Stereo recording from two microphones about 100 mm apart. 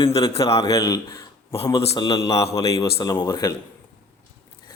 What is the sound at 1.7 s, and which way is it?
Speech, 90° left.